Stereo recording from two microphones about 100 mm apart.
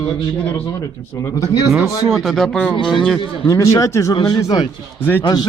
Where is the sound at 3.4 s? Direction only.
35° left (ahead or behind).